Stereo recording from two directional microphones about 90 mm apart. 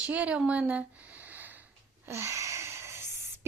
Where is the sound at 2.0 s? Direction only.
30° right (ahead or behind).